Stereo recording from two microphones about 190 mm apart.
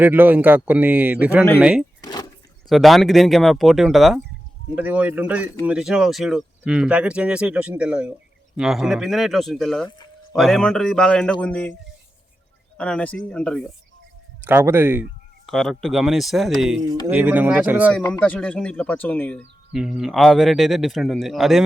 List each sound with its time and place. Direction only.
0.0 s speech: 10° right (ahead or behind)
2.0 s a sound: 20° left (ahead or behind)
2.6 s speech: centre (ahead or behind)
12.7 s speech: 5° left (ahead or behind)
14.4 s speech: 10° right (ahead or behind)
15.4 s speech: centre (ahead or behind)
17.9 s speech: 5° left (ahead or behind)
19.7 s speech: 5° right (ahead or behind)